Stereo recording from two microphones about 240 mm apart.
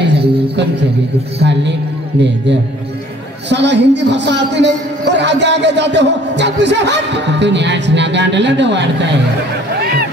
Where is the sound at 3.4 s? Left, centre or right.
Right.